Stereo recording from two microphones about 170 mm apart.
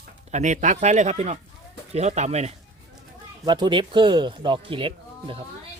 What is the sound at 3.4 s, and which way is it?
Speech, 25° right (ahead or behind).